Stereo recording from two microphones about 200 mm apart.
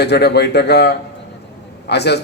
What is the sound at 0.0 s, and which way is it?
A man's voice, 55° left (ahead or behind).